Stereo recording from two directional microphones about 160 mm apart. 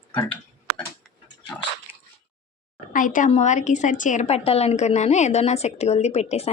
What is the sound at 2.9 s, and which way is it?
A woman's voice, 55° left (ahead or behind).